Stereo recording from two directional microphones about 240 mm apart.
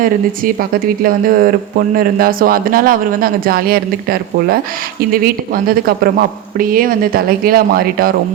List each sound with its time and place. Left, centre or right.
0.0 s speech: right